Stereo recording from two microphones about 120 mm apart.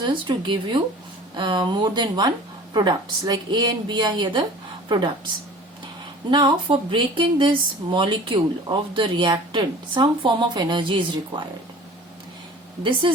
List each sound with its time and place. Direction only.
0.0 s speech: 40° right (ahead or behind)
6.3 s speech: 40° right (ahead or behind)
12.8 s speech: 40° right (ahead or behind)